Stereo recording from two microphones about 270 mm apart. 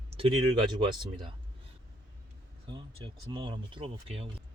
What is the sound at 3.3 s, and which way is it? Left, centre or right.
Speech, centre.